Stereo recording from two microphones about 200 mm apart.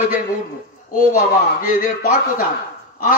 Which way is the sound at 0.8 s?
45° left (ahead or behind).